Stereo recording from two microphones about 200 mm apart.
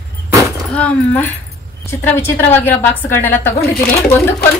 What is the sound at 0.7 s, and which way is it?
A woman's voice, 5° left (ahead or behind).